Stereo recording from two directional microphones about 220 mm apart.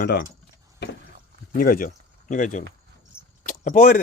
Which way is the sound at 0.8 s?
50° left (ahead or behind).